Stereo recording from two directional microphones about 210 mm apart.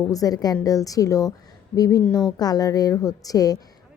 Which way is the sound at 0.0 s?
15° left (ahead or behind).